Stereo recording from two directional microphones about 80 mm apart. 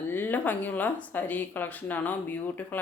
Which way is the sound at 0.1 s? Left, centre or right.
Left.